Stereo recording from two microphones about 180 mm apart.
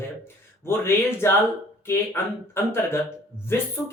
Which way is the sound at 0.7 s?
15° left (ahead or behind).